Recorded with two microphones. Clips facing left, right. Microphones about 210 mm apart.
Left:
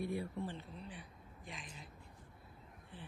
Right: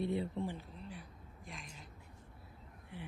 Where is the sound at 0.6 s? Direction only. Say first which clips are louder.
Right 1 dB; centre (ahead or behind).